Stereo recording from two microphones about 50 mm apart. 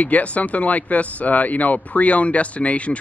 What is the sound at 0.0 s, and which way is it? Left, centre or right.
Speech, left.